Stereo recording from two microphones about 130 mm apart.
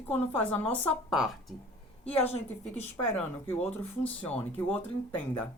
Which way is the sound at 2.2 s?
60° left (ahead or behind).